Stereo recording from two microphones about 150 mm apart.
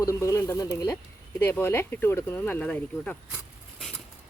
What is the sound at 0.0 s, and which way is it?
Speech, 20° left (ahead or behind).